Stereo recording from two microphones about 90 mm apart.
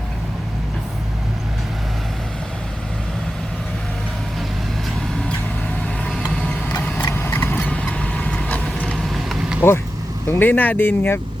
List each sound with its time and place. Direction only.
6.1 s vehicle: 10° left (ahead or behind)
9.6 s speech: 25° left (ahead or behind)